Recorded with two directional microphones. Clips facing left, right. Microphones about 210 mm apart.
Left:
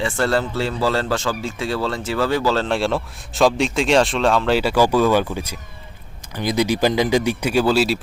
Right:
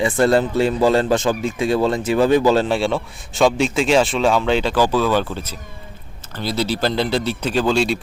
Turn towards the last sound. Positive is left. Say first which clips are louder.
# left 1 dB
turn(degrees=5)  # may be behind; listen again after turning